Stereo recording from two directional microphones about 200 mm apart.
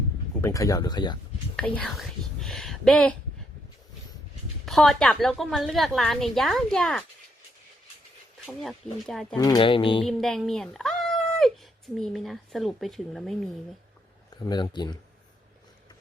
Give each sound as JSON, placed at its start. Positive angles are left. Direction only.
{"t": 0.4, "sound": "speech", "side_deg": 15}
{"t": 1.5, "sound": "speech", "side_deg": 5}
{"t": 4.6, "sound": "a woman's voice", "side_deg": 0}
{"t": 8.4, "sound": "a woman's voice", "side_deg": 0}
{"t": 9.3, "sound": "speech", "side_deg": 20}
{"t": 10.0, "sound": "speech", "side_deg": 0}
{"t": 14.4, "sound": "speech", "side_deg": 20}